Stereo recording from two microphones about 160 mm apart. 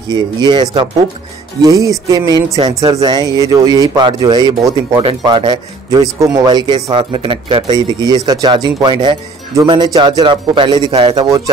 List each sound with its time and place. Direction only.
0.1 s speech: 25° right (ahead or behind)